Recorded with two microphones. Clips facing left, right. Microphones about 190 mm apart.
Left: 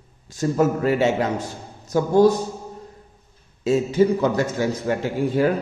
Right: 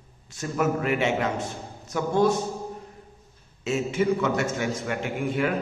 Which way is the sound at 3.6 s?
35° left (ahead or behind).